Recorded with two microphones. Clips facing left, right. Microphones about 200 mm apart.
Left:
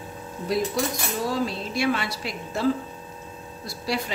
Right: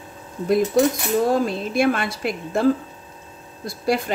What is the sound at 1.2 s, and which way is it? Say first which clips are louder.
Speech: right 6 dB; 50° right (ahead or behind).